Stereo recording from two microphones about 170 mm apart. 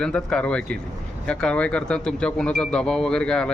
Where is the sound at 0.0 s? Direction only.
5° left (ahead or behind).